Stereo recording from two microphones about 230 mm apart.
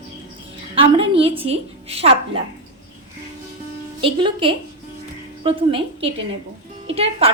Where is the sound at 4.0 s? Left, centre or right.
Right.